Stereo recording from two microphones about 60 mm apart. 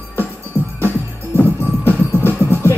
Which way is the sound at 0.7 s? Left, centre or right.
Left.